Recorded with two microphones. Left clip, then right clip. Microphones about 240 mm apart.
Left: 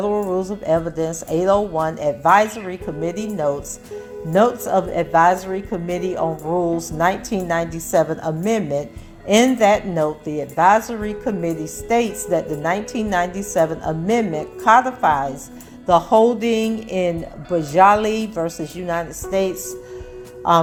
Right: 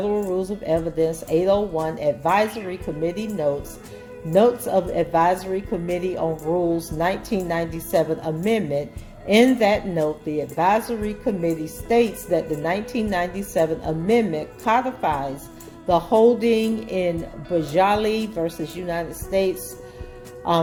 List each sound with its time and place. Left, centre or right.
0.3 s a woman's voice: centre